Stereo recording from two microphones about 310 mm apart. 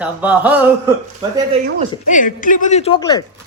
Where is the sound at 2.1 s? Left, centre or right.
Left.